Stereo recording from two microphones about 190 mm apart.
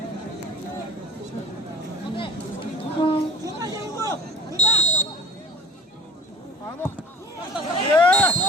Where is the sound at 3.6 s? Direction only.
20° right (ahead or behind).